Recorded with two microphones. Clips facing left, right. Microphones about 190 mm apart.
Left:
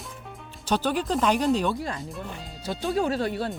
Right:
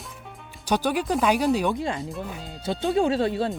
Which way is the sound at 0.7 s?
10° right (ahead or behind).